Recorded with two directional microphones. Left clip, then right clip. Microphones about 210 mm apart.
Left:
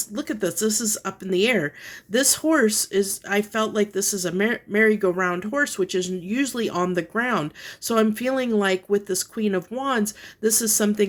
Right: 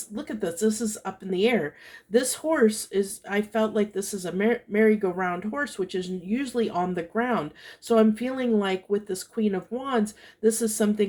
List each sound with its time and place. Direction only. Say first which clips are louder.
0.1 s speech: left 3 dB; 45° left (ahead or behind)